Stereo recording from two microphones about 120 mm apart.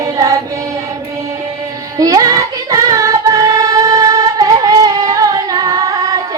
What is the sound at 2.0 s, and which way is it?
Child singing, 30° right (ahead or behind).